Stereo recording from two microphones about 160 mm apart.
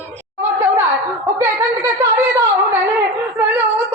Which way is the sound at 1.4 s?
15° right (ahead or behind).